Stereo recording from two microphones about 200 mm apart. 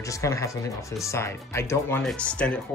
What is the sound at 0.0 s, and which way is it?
Speech, 15° left (ahead or behind).